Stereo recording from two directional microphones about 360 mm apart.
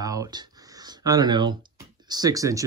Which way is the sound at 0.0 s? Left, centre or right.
Centre.